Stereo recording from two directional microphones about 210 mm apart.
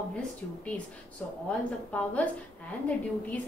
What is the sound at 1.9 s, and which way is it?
A woman's voice, 5° left (ahead or behind).